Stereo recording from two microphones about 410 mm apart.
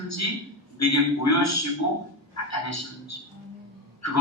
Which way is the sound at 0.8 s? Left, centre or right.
Left.